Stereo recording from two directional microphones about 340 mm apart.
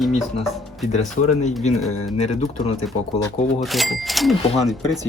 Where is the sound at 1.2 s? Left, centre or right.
Left.